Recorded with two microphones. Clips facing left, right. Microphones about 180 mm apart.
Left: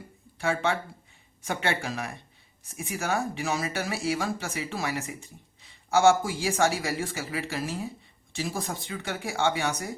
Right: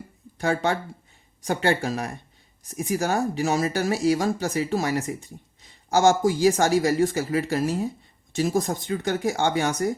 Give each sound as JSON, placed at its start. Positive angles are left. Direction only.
{"t": 0.3, "sound": "speech", "side_deg": -40}